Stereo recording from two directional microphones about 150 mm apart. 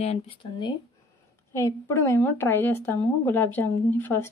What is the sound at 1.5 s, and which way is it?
Speech, 20° left (ahead or behind).